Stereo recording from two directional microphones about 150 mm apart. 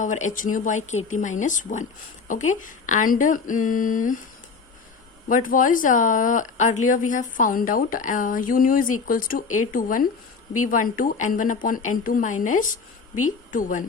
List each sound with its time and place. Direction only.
0.0 s speech: 55° left (ahead or behind)
5.3 s speech: 65° left (ahead or behind)